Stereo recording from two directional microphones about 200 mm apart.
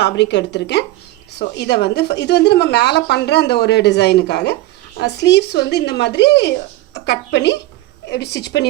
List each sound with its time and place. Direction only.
0.0 s a woman's voice: 60° left (ahead or behind)